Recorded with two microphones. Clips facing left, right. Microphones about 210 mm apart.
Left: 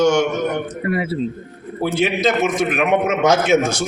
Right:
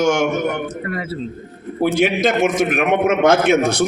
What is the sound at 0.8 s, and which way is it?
Speech, 10° left (ahead or behind).